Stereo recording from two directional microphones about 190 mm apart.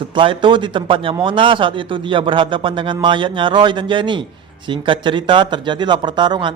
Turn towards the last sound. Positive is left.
turn(degrees=-25)  # may be behind; listen again after turning